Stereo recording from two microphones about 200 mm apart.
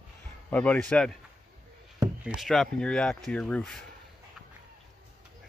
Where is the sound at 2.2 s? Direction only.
5° right (ahead or behind).